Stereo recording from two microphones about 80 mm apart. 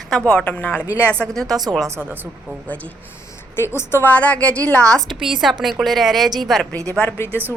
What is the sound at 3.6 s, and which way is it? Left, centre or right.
Speech, left.